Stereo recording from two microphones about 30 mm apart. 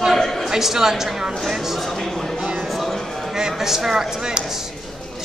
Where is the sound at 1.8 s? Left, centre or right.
Centre.